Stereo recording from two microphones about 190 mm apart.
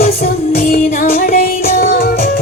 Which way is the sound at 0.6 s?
45° left (ahead or behind).